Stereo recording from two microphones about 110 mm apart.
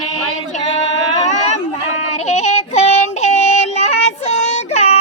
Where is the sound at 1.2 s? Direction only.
90° left.